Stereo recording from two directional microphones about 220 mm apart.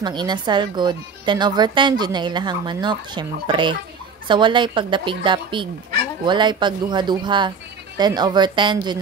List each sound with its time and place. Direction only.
0.0 s speech: 20° right (ahead or behind)